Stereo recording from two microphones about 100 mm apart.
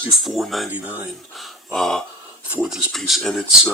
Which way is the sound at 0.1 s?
Centre (ahead or behind).